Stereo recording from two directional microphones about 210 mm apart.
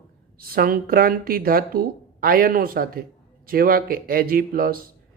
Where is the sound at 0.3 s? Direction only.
45° right (ahead or behind).